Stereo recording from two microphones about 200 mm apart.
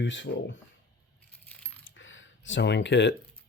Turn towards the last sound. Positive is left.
turn(degrees=60)  # may be behind; listen again after turning